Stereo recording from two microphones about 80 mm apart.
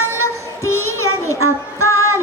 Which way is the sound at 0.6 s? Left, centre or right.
Left.